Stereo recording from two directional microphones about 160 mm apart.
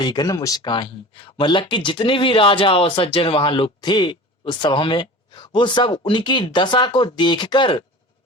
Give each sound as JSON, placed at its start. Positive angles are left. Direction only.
{"t": 0.0, "sound": "speech", "side_deg": 25}